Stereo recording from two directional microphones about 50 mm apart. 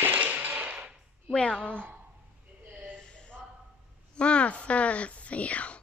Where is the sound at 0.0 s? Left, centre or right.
Right.